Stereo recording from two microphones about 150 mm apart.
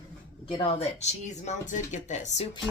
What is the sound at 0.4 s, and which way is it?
Speech, 40° left (ahead or behind).